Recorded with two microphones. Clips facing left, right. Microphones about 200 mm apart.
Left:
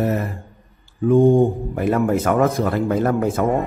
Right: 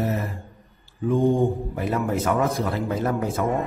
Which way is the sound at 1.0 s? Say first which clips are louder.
Left 6 dB; 55° left (ahead or behind).